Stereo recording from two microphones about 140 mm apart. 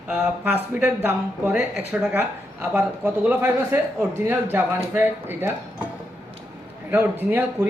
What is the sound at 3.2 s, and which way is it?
Speech, 10° right (ahead or behind).